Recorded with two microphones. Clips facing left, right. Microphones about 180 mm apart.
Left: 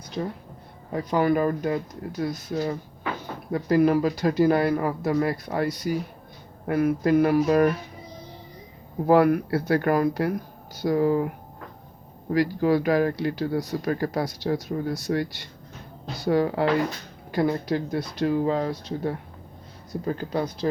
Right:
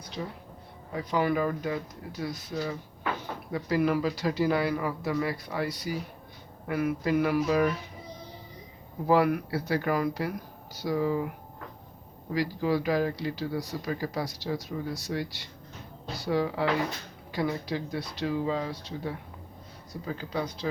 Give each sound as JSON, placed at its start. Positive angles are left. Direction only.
{"t": 0.2, "sound": "speech", "side_deg": 50}
{"t": 9.0, "sound": "speech", "side_deg": 50}
{"t": 12.3, "sound": "speech", "side_deg": 55}